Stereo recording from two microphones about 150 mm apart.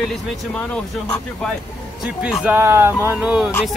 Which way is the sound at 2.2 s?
10° right (ahead or behind).